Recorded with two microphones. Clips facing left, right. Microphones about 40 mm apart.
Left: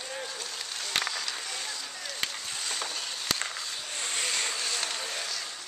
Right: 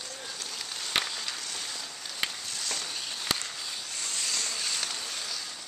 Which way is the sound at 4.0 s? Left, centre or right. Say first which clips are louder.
Left 4 dB; left.